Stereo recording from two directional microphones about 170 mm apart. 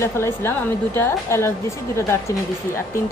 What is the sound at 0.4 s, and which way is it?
A woman's voice, 15° left (ahead or behind).